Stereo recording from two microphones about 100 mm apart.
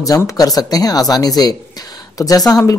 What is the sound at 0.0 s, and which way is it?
Speech, 40° left (ahead or behind).